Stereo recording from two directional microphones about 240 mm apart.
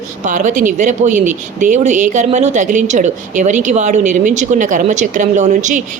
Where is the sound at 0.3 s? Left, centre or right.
Right.